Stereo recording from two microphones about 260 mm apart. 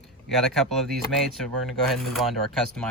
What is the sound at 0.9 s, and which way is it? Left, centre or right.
Speech, centre.